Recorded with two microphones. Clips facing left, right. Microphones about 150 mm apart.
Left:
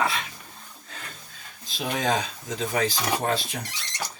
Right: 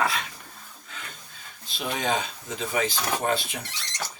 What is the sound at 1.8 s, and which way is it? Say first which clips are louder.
Speech: left 2 dB; 45° left (ahead or behind).